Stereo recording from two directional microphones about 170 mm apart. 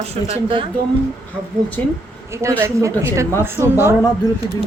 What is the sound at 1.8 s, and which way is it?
Speech, 10° left (ahead or behind).